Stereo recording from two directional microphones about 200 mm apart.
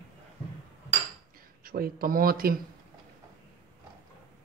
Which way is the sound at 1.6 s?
45° right (ahead or behind).